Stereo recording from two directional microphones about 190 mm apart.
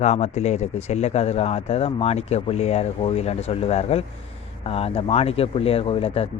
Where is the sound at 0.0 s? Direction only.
35° left (ahead or behind).